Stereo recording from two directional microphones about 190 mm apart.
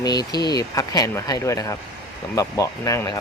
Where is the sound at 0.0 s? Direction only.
20° left (ahead or behind).